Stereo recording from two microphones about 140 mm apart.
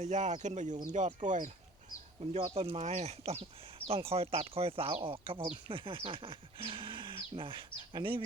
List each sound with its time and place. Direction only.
0.0 s speech: 60° right (ahead or behind)
2.3 s speech: 40° right (ahead or behind)